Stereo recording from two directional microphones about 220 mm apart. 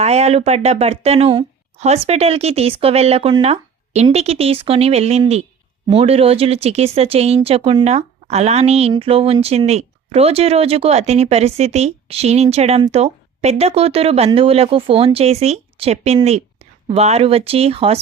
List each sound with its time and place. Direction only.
0.0 s speech: 30° right (ahead or behind)